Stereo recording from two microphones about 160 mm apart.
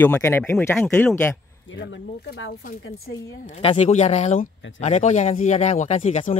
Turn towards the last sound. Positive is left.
turn(degrees=50)  # may be behind; listen again after turning